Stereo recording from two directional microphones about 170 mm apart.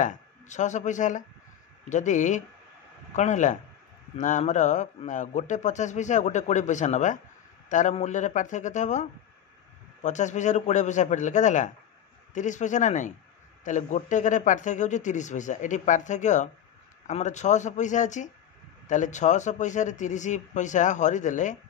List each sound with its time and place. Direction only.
0.0 s a man's voice: 45° left (ahead or behind)
10.0 s a man's voice: 45° left (ahead or behind)